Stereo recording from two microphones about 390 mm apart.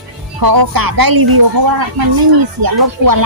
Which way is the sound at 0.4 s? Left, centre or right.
Right.